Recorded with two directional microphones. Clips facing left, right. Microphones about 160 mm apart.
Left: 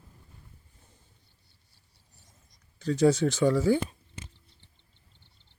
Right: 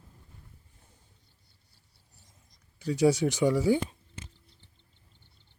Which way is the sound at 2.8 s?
10° right (ahead or behind).